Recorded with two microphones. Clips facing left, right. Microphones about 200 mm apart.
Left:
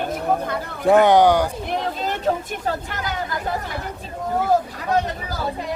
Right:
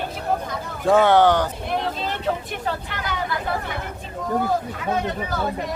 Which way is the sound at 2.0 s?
45° left (ahead or behind).